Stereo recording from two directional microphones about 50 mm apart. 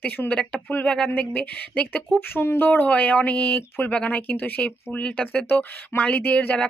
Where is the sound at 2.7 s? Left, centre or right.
Left.